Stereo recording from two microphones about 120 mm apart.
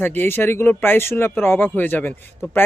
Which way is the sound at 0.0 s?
15° left (ahead or behind).